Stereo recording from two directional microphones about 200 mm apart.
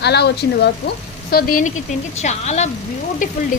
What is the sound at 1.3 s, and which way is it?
Speech, 45° left (ahead or behind).